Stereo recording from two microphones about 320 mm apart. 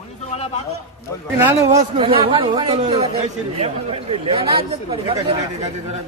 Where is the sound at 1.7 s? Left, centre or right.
Centre.